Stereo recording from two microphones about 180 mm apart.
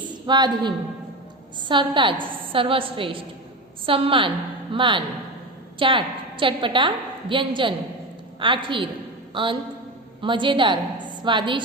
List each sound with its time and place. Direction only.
0.3 s a woman's voice: 25° right (ahead or behind)